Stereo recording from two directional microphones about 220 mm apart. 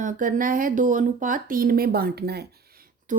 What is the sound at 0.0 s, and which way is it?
Speech, 40° right (ahead or behind).